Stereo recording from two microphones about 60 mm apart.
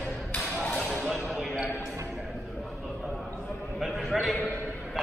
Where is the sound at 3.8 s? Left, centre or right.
Centre.